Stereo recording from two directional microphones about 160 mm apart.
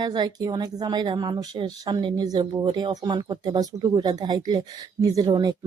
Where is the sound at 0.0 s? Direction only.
25° right (ahead or behind).